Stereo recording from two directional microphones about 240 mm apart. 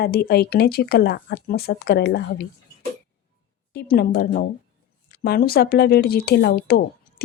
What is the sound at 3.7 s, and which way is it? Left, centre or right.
Speech, left.